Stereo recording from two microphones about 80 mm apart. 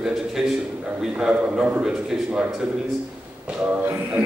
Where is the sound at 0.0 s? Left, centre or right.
Centre.